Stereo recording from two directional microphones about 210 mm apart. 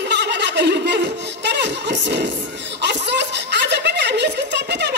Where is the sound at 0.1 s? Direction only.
55° right (ahead or behind).